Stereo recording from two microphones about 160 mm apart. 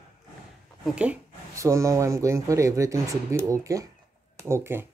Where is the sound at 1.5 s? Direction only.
20° right (ahead or behind).